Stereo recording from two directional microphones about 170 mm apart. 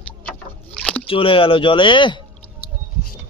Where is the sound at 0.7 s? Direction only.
5° left (ahead or behind).